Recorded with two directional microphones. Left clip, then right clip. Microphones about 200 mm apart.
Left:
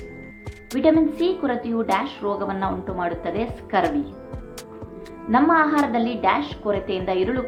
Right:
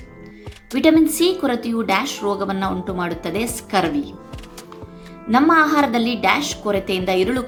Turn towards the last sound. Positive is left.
turn(degrees=-35)  # may be behind; listen again after turning